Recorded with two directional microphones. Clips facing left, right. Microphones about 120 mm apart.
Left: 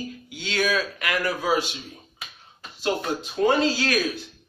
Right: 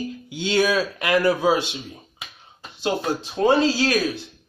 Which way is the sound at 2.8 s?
30° right (ahead or behind).